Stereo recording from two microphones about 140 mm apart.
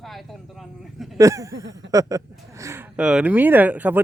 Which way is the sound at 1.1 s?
25° right (ahead or behind).